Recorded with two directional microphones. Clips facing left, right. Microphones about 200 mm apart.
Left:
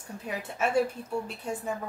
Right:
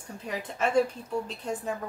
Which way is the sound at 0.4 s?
5° left (ahead or behind).